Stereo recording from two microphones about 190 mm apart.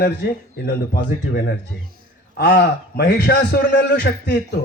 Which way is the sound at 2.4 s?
60° left (ahead or behind).